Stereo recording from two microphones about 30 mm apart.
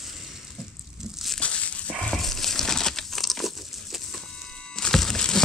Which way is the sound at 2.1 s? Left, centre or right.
Centre.